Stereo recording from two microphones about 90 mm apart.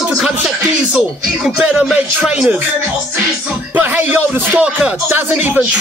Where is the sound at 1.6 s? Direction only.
15° right (ahead or behind).